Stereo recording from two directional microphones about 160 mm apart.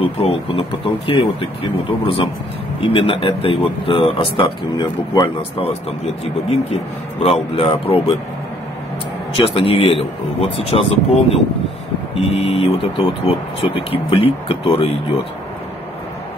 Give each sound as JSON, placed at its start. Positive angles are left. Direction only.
{"t": 0.0, "sound": "speech", "side_deg": 35}
{"t": 6.5, "sound": "speech", "side_deg": 40}
{"t": 9.5, "sound": "speech", "side_deg": 35}